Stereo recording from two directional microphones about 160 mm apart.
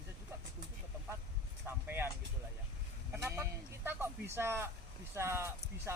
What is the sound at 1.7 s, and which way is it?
Speech, 15° right (ahead or behind).